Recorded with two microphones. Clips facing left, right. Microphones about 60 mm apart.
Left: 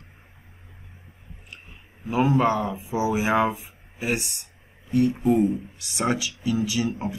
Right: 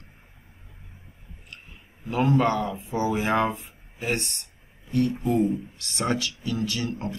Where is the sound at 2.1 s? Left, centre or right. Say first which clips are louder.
Left 1 dB; centre.